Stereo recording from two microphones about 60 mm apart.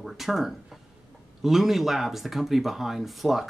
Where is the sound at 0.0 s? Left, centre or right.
Centre.